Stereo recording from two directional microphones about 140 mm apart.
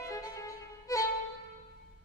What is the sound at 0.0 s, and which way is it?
Violin, 20° left (ahead or behind).